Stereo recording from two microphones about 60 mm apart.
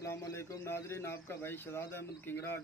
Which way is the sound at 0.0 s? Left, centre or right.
Left.